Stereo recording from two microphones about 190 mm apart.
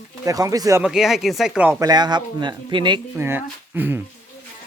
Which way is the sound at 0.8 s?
5° right (ahead or behind).